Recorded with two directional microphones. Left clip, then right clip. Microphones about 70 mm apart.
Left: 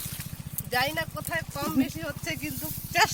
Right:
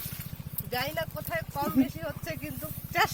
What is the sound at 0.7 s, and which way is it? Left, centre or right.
Speech, centre.